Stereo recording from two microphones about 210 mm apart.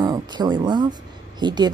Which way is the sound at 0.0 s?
20° right (ahead or behind).